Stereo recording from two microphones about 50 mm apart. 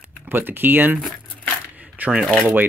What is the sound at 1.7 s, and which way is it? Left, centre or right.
Coin, right.